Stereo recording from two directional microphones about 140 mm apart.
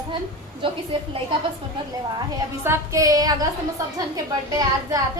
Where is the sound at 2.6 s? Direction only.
20° right (ahead or behind).